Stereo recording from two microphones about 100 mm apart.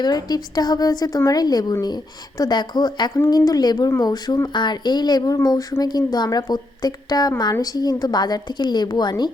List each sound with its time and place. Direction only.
0.0 s a woman's voice: 40° left (ahead or behind)